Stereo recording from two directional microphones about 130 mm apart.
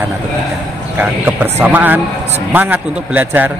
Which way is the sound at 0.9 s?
15° right (ahead or behind).